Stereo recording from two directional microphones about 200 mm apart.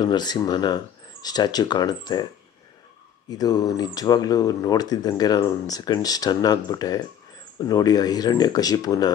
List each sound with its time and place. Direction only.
0.0 s speech: 20° left (ahead or behind)
3.3 s speech: 20° left (ahead or behind)